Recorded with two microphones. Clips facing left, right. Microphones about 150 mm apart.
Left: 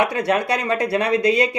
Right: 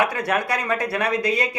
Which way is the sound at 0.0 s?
25° left (ahead or behind).